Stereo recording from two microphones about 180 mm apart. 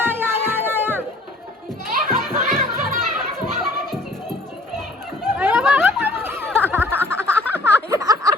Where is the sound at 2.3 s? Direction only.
50° right (ahead or behind).